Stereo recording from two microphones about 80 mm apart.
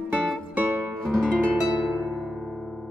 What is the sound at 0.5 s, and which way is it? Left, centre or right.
Music, right.